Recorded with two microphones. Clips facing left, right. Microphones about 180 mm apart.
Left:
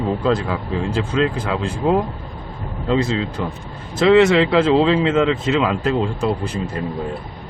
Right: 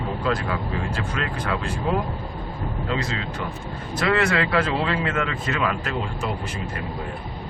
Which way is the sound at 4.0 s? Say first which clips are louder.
Left 9 dB; 20° left (ahead or behind).